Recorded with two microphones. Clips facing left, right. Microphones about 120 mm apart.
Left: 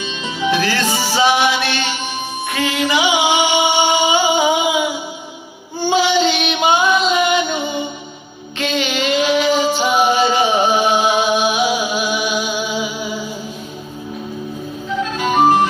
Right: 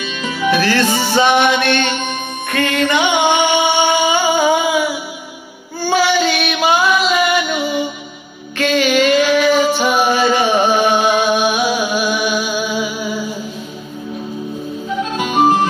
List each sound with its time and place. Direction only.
0.0 s music: 20° left (ahead or behind)
1.6 s music: 55° right (ahead or behind)
2.5 s music: 10° left (ahead or behind)
5.8 s child singing: 20° left (ahead or behind)
8.5 s a sound: 15° left (ahead or behind)
9.8 s music: 15° left (ahead or behind)